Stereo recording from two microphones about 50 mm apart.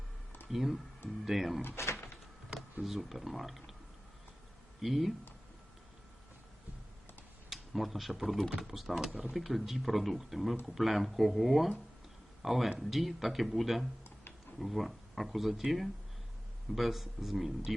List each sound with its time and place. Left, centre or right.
0.5 s speech: centre
1.6 s door: left
2.8 s speech: centre
4.8 s speech: centre
7.5 s speech: centre